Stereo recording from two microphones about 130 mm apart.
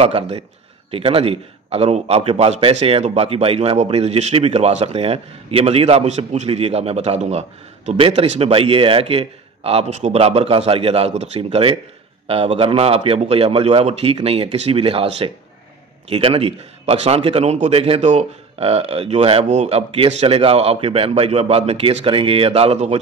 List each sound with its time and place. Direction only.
0.0 s a man's voice: 50° right (ahead or behind)